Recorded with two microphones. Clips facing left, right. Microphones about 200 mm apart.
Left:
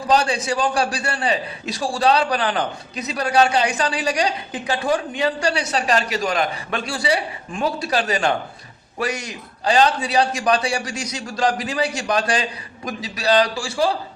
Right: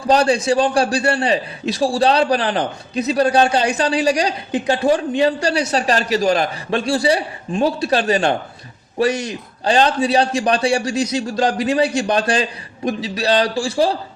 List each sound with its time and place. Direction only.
0.1 s a man's voice: 35° right (ahead or behind)
9.6 s a man's voice: 35° right (ahead or behind)